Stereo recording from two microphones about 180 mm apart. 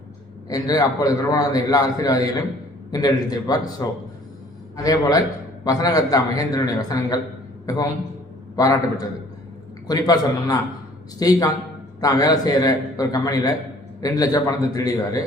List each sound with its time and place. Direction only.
0.4 s a man's voice: 20° left (ahead or behind)